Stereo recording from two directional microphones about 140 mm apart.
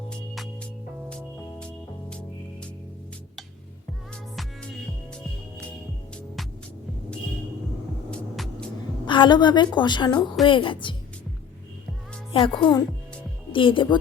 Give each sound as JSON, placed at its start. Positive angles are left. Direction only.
{"t": 1.1, "sound": "music", "side_deg": 5}
{"t": 9.0, "sound": "a woman's voice", "side_deg": 35}
{"t": 12.3, "sound": "a woman's voice", "side_deg": 40}